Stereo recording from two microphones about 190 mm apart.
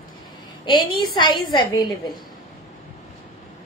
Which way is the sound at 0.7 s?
25° left (ahead or behind).